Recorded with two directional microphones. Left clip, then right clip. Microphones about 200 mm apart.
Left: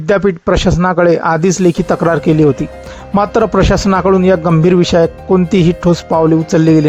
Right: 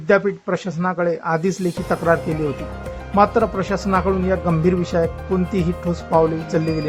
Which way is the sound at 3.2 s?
40° left (ahead or behind).